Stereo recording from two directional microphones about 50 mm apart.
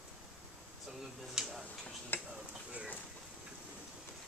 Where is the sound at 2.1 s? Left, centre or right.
Left.